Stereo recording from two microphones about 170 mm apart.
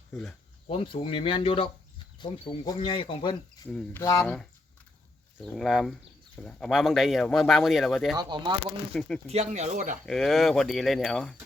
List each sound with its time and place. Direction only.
0.7 s speech: 30° left (ahead or behind)
5.4 s speech: centre (ahead or behind)
8.1 s speech: 25° right (ahead or behind)
9.0 s speech: 5° left (ahead or behind)
9.2 s speech: 40° right (ahead or behind)
10.1 s speech: centre (ahead or behind)